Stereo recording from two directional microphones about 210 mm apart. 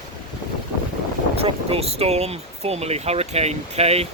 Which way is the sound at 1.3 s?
30° right (ahead or behind).